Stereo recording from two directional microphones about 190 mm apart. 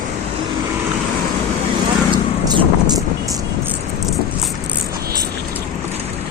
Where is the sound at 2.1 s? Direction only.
25° right (ahead or behind).